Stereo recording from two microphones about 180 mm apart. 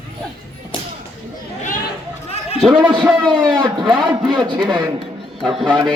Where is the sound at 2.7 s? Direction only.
25° right (ahead or behind).